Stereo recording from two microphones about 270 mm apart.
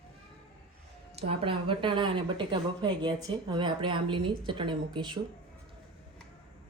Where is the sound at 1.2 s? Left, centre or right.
Centre.